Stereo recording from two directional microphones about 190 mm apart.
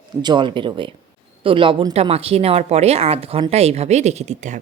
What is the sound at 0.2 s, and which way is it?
A woman's voice, 25° right (ahead or behind).